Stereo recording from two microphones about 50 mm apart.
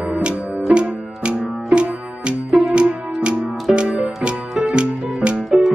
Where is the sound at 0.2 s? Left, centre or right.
Right.